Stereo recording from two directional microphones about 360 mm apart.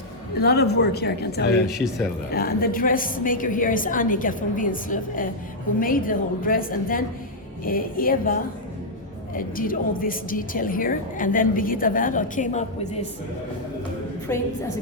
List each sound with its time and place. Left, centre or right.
0.3 s a woman's voice: left
1.6 s speech: centre
2.3 s a woman's voice: left
14.3 s a woman's voice: centre